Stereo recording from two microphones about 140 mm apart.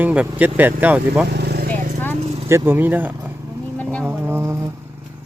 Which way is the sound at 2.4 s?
15° right (ahead or behind).